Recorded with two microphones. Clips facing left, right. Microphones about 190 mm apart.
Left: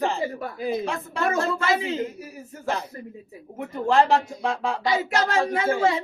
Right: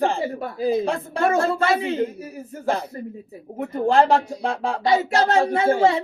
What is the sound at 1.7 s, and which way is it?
Speech, 60° right (ahead or behind).